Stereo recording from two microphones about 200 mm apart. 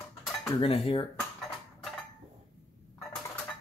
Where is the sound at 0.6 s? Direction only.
30° left (ahead or behind).